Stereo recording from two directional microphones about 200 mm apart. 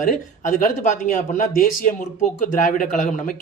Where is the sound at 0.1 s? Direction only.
40° left (ahead or behind).